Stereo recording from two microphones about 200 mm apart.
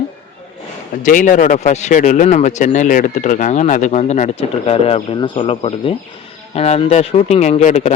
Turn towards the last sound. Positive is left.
turn(degrees=35)  # may be behind; listen again after turning